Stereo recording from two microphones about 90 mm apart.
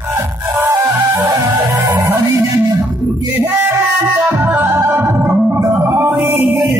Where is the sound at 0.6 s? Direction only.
25° right (ahead or behind).